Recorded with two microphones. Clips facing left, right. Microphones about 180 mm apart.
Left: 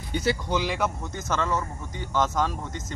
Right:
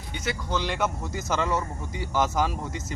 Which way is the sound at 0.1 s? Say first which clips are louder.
Left 6 dB; 35° left (ahead or behind).